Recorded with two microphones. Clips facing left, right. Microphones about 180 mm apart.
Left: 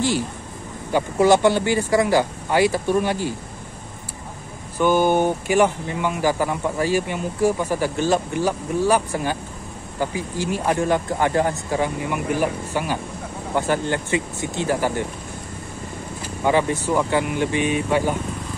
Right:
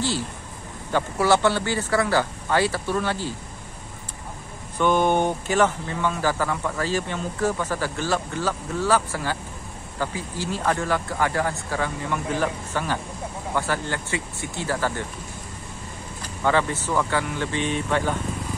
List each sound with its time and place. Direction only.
0.9 s a man's voice: 15° left (ahead or behind)
4.7 s a man's voice: 5° left (ahead or behind)
16.4 s a man's voice: 15° left (ahead or behind)